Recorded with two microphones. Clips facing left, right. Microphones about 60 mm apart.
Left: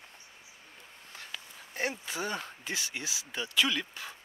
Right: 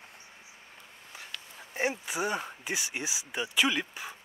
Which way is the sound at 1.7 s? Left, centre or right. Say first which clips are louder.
Right 3 dB; centre.